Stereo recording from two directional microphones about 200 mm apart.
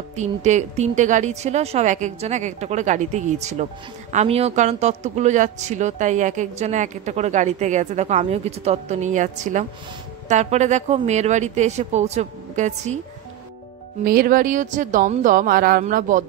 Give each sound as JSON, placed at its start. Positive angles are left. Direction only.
{"t": 0.1, "sound": "speech", "side_deg": -35}
{"t": 14.0, "sound": "speech", "side_deg": -45}